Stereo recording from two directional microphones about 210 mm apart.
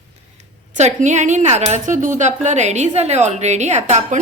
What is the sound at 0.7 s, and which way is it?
A woman's voice, 35° right (ahead or behind).